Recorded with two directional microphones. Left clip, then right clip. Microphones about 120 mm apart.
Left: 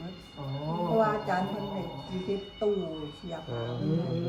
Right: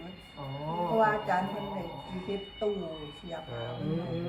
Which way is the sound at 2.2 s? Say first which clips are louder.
Left 3 dB; centre (ahead or behind).